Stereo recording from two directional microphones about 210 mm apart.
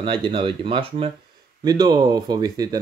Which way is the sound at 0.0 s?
25° right (ahead or behind).